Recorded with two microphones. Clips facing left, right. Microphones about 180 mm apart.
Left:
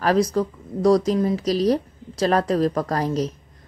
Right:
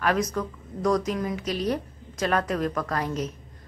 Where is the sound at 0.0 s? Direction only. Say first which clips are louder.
Left 6 dB; 35° left (ahead or behind).